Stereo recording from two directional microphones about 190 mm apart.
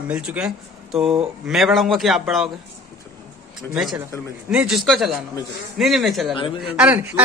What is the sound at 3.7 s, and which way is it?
Speech, centre (ahead or behind).